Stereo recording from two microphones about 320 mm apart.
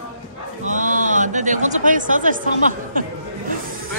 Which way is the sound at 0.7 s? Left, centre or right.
Right.